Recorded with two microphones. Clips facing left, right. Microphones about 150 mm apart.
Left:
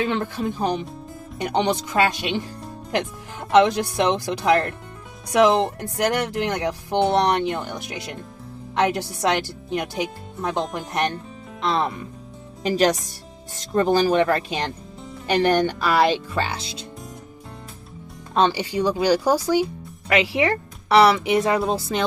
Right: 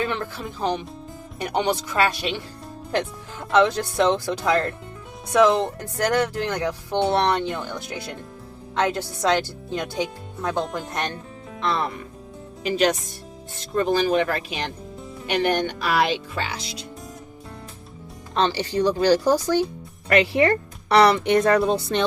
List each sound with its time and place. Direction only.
0.0 s speech: 20° left (ahead or behind)
3.5 s speech: 15° left (ahead or behind)
12.6 s speech: 40° left (ahead or behind)
18.4 s speech: 10° left (ahead or behind)